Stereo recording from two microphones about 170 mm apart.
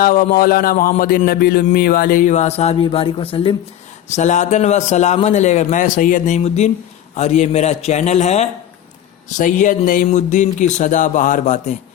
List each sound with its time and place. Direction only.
0.0 s a man's voice: 55° left (ahead or behind); by 3.5 s 30° left (ahead or behind)
4.1 s a man's voice: 45° left (ahead or behind)